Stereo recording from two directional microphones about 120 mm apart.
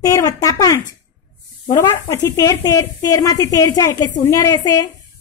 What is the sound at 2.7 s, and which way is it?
A woman's voice, 30° left (ahead or behind).